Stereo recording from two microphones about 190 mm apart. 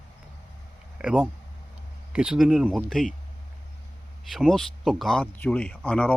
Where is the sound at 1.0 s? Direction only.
5° right (ahead or behind).